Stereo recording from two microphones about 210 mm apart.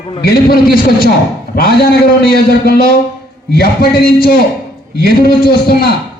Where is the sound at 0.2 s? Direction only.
45° left (ahead or behind).